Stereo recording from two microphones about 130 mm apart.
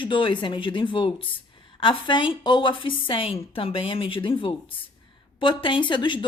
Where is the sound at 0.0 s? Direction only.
40° left (ahead or behind).